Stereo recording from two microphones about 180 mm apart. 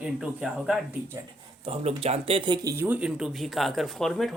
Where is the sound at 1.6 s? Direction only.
35° right (ahead or behind); by 4.3 s centre (ahead or behind).